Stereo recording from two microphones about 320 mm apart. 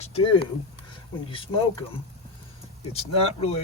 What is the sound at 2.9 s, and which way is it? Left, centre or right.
Speech, centre.